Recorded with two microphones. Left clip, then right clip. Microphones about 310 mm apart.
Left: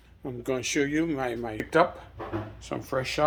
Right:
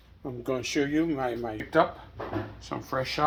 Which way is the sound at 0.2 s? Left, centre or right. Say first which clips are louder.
Left 1 dB; centre.